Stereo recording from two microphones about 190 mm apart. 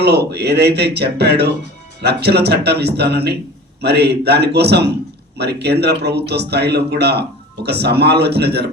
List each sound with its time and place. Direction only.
0.0 s speech: 60° right (ahead or behind)